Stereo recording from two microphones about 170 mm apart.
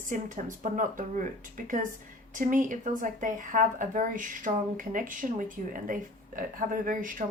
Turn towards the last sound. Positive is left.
turn(degrees=-50)  # may be behind; listen again after turning